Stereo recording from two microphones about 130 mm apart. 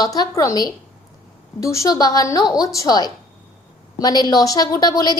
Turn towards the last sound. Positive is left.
turn(degrees=30)  # may be behind; listen again after turning